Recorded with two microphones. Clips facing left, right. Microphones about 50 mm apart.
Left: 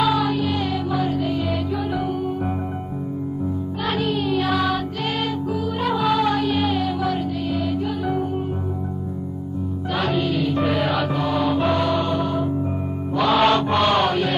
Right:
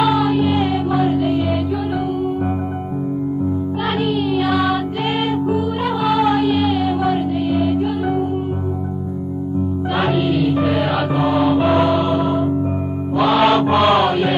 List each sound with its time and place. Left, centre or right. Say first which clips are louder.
0.0 s music: right 4 dB; centre
0.4 s music: right 6 dB; right
4.0 s music: right 3 dB; centre
5.9 s music: right 2 dB; centre
10.1 s music: right 4 dB; centre
13.3 s mantra: right 3 dB; centre